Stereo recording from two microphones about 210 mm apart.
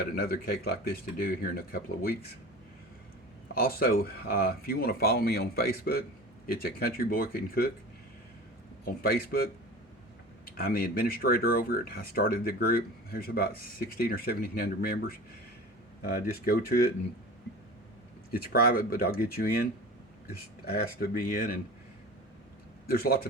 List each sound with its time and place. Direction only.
0.2 s speech: 45° left (ahead or behind)
3.5 s speech: 45° left (ahead or behind)
8.8 s speech: 45° left (ahead or behind)
10.6 s speech: 45° left (ahead or behind)
18.3 s speech: 45° left (ahead or behind)
22.9 s speech: 45° left (ahead or behind)